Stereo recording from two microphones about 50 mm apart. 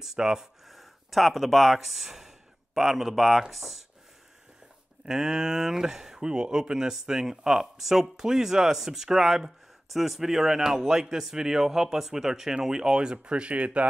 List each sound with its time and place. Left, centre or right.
0.0 s speech: centre
0.7 s speech: centre
5.0 s speech: centre